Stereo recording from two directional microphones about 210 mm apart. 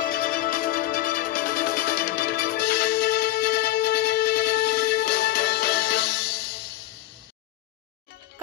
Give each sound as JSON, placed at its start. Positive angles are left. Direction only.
{"t": 0.0, "sound": "music", "side_deg": 40}